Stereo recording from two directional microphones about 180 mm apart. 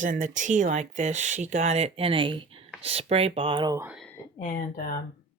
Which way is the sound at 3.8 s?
5° right (ahead or behind).